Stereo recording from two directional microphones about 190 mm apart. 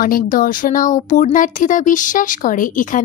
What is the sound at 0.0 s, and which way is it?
Speech, 45° left (ahead or behind).